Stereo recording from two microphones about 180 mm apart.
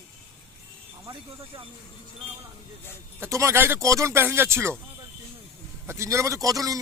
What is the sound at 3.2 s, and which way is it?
A man's voice, 15° right (ahead or behind).